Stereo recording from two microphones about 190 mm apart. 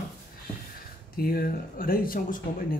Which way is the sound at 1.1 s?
50° left (ahead or behind).